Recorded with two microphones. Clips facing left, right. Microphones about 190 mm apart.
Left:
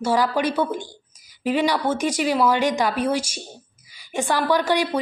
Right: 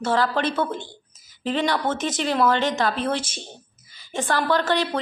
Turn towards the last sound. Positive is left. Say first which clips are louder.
# left 2 dB
turn(degrees=10)  # may be behind; listen again after turning